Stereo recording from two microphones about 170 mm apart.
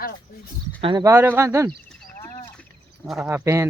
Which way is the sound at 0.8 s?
25° right (ahead or behind).